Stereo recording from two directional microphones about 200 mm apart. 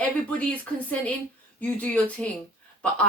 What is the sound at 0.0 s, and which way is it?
Speech, 5° left (ahead or behind).